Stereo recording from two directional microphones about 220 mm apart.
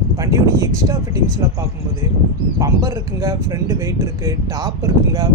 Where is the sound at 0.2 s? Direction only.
15° right (ahead or behind).